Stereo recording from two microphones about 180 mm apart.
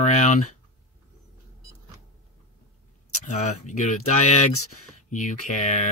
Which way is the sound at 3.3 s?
40° left (ahead or behind).